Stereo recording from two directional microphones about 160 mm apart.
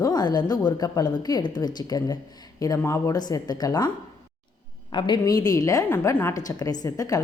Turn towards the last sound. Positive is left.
turn(degrees=20)  # may be behind; listen again after turning